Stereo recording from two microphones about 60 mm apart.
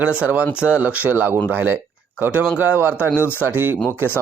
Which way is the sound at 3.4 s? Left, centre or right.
Right.